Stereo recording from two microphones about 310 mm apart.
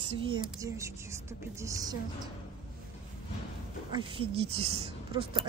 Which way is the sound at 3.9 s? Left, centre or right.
Centre.